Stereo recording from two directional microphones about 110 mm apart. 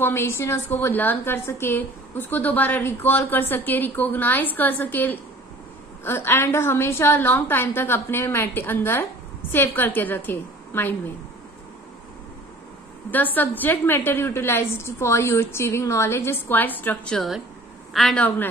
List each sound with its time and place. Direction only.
0.0 s a woman's voice: 20° left (ahead or behind)
13.1 s a woman's voice: 15° left (ahead or behind)